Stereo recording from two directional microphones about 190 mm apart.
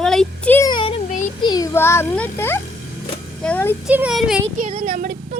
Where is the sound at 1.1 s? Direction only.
40° left (ahead or behind).